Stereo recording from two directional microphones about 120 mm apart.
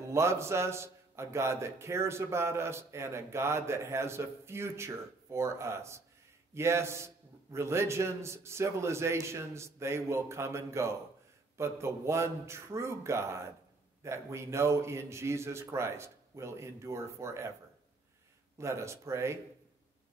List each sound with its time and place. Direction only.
0.1 s a man's voice: 20° right (ahead or behind)
18.6 s a man's voice: 25° right (ahead or behind)